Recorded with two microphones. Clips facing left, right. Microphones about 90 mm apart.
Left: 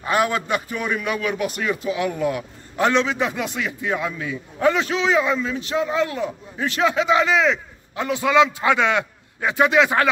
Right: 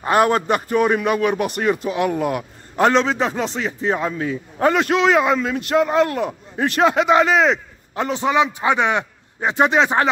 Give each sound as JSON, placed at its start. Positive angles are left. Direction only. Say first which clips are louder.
{"t": 0.0, "sound": "a man's voice", "louder": "right 5 dB", "side_deg": -50}
{"t": 8.2, "sound": "a man's voice", "louder": "left 2 dB", "side_deg": -20}
{"t": 9.6, "sound": "speech", "louder": "right 1 dB", "side_deg": -35}